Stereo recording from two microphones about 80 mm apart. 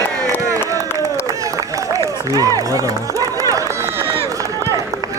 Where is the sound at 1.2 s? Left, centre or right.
Right.